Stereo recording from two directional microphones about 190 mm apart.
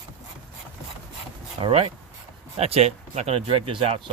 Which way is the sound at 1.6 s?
30° right (ahead or behind).